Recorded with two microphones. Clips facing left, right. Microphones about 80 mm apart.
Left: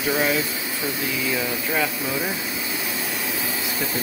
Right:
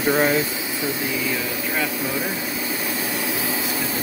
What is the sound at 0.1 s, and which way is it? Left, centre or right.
Speech, right.